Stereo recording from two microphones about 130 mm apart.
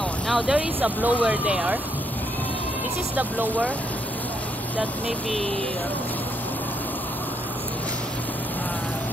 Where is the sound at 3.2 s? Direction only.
15° right (ahead or behind).